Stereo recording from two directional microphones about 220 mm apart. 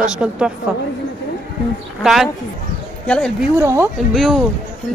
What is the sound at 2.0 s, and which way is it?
Speech, centre (ahead or behind).